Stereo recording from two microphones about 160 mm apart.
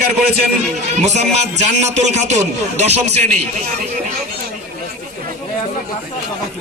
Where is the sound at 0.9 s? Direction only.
45° right (ahead or behind).